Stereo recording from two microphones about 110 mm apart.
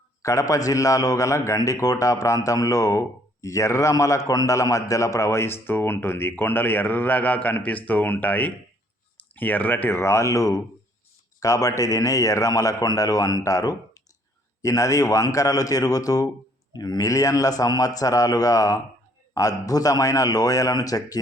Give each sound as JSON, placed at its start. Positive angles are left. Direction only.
{"t": 0.2, "sound": "a man's voice", "side_deg": 30}